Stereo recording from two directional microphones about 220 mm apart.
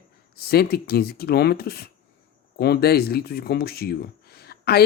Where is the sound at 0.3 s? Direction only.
45° left (ahead or behind).